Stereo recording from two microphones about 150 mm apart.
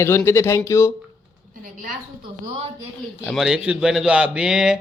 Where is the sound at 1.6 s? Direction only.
65° right (ahead or behind).